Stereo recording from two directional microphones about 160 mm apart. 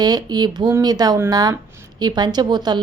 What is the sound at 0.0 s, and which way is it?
A woman's voice, 25° right (ahead or behind).